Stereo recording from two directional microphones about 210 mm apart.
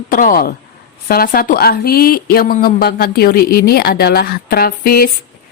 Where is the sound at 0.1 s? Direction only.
40° left (ahead or behind).